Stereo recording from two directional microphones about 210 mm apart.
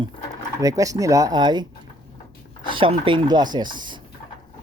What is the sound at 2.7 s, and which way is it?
Speech, 25° right (ahead or behind).